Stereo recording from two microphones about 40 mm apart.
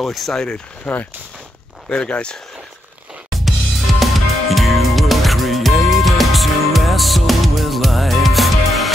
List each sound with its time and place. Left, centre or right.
0.0 s speech: centre
0.9 s speech: left
2.0 s speech: left
3.4 s music: centre